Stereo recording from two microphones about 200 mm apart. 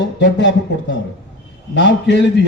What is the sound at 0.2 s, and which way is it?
A man's voice, 60° left (ahead or behind).